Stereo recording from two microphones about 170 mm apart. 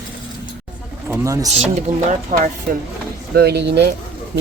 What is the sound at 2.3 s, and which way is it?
Speech, 50° right (ahead or behind).